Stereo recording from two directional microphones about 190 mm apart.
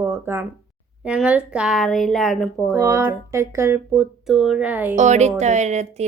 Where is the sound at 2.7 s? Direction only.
15° right (ahead or behind).